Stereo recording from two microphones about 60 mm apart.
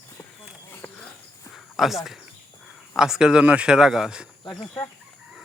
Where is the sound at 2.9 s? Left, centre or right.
Centre.